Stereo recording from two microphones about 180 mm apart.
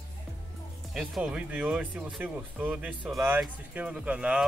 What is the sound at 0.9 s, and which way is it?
Speech, centre (ahead or behind).